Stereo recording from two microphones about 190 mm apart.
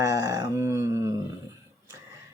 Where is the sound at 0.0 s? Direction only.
15° right (ahead or behind).